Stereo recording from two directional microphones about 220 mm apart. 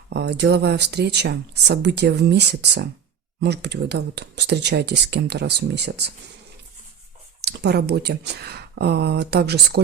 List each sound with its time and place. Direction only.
0.1 s speech: 50° right (ahead or behind)
7.4 s speech: 50° right (ahead or behind)